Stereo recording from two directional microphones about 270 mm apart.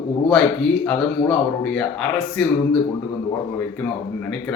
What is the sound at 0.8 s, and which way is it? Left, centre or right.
Speech, centre.